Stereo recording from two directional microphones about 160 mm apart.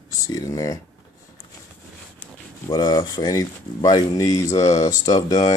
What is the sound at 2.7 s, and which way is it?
Speech, 25° left (ahead or behind).